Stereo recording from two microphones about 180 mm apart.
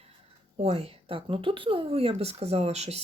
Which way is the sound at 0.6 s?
35° right (ahead or behind).